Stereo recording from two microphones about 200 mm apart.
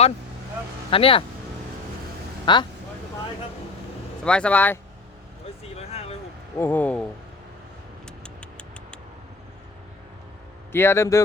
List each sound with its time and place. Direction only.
0.9 s speech: 25° left (ahead or behind)
2.5 s speech: 25° left (ahead or behind)
4.2 s speech: 5° left (ahead or behind)
5.9 s a sound: 30° left (ahead or behind)
6.6 s a man's voice: 10° left (ahead or behind)
8.0 s a sound: 5° left (ahead or behind)
10.7 s a man's voice: 10° left (ahead or behind)